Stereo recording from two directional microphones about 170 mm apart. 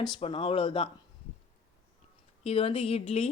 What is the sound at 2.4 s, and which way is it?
Speech, 35° left (ahead or behind).